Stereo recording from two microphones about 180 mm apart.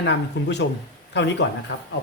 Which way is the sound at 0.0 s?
75° left (ahead or behind).